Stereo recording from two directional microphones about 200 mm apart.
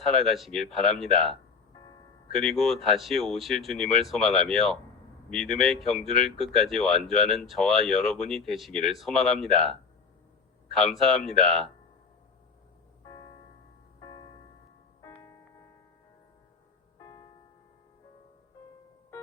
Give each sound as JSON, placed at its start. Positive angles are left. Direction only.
{"t": 0.1, "sound": "speech", "side_deg": 0}
{"t": 2.3, "sound": "speech", "side_deg": 0}
{"t": 13.1, "sound": "music", "side_deg": 20}
{"t": 17.0, "sound": "music", "side_deg": 20}